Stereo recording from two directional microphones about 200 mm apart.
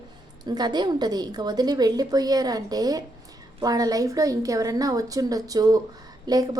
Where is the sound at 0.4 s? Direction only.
20° right (ahead or behind).